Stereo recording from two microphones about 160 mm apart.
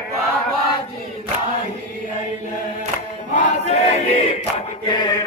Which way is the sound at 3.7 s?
45° left (ahead or behind).